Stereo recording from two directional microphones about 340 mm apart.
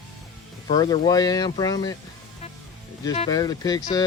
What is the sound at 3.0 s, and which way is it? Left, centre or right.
Speech, centre.